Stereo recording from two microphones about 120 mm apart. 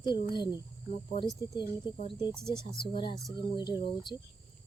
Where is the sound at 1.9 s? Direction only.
40° left (ahead or behind).